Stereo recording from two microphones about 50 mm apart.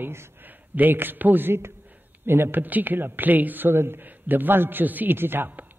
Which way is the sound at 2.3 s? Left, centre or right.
Right.